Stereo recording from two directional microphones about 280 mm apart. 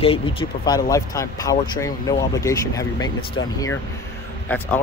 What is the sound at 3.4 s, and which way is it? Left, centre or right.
Speech, left.